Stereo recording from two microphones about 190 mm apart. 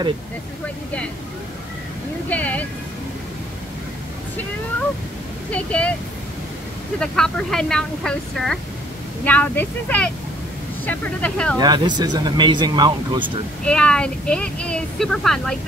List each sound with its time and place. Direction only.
2.2 s speech: 10° left (ahead or behind)
5.5 s speech: 5° left (ahead or behind)
7.0 s a woman's voice: 5° left (ahead or behind)
11.5 s speech: 20° right (ahead or behind)
13.7 s a woman's voice: 5° left (ahead or behind)